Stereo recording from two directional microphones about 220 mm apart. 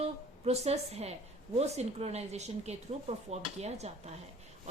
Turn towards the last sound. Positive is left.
turn(degrees=-30)  # may be behind; listen again after turning